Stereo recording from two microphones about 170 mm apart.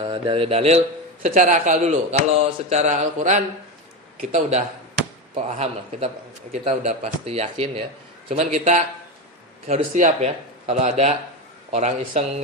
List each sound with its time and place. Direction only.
0.0 s a man's voice: 30° right (ahead or behind)